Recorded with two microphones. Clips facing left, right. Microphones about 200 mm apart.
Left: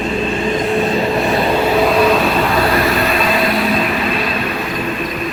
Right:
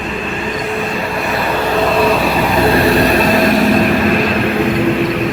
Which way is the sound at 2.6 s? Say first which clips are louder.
Right 4 dB; 30° right (ahead or behind).